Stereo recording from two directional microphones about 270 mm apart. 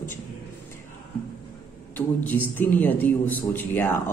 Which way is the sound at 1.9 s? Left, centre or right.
Centre.